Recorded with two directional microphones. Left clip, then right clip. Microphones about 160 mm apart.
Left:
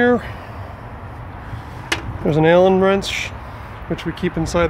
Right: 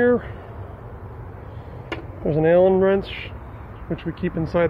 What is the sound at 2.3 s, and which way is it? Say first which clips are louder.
Speech: left 3 dB; 40° left (ahead or behind).